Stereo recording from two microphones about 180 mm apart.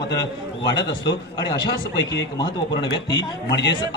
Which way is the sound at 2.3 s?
25° left (ahead or behind).